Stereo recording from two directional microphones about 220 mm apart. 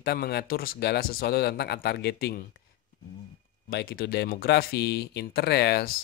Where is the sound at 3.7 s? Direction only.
45° left (ahead or behind).